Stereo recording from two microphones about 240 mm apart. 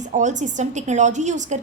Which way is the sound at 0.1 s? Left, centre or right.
Right.